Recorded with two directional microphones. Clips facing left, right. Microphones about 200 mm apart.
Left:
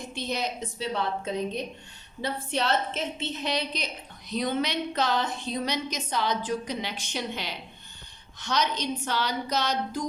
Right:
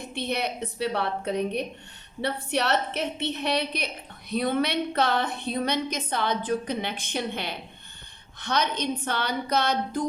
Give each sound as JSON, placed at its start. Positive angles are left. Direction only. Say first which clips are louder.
{"t": 0.0, "sound": "a woman's voice", "louder": "right 2 dB", "side_deg": -60}